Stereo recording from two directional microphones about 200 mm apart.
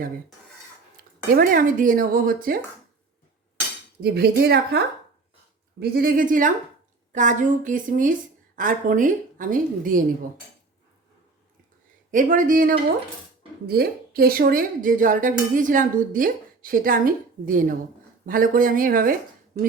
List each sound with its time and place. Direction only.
1.3 s a woman's voice: 45° right (ahead or behind)
4.0 s a woman's voice: 55° right (ahead or behind)
5.8 s a woman's voice: 50° right (ahead or behind)
12.1 s a woman's voice: 40° right (ahead or behind)